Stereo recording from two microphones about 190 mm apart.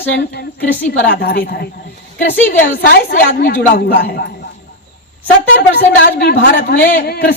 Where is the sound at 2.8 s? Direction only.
55° left (ahead or behind).